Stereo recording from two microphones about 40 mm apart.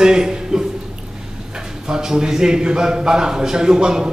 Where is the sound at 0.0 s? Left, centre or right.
Centre.